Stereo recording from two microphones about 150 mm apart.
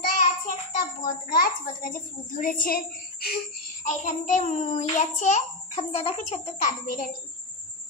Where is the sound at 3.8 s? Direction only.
55° left (ahead or behind).